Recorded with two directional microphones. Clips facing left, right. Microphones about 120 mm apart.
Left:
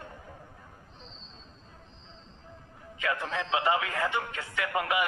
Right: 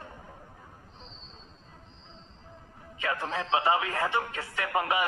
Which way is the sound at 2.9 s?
30° right (ahead or behind).